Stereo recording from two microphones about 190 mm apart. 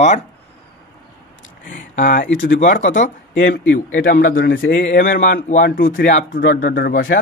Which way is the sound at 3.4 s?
80° left.